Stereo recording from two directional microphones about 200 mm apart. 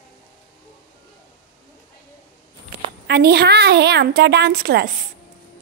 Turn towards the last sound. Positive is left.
turn(degrees=-50)  # may be behind; listen again after turning